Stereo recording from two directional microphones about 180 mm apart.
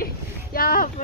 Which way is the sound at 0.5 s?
55° left (ahead or behind).